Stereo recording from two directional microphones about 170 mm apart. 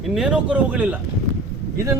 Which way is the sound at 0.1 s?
5° right (ahead or behind).